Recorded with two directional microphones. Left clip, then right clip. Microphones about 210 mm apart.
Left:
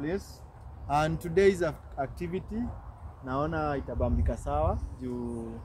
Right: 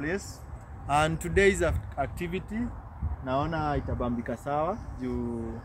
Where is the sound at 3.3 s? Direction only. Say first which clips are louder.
Right 2 dB; 45° right (ahead or behind).